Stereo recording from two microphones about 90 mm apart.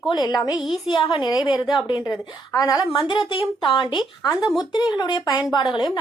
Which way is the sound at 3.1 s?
70° left (ahead or behind).